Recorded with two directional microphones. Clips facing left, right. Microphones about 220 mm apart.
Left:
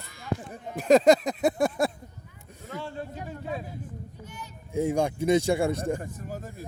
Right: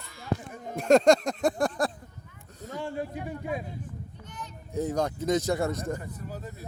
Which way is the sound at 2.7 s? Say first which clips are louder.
Right 3 dB; 15° right (ahead or behind).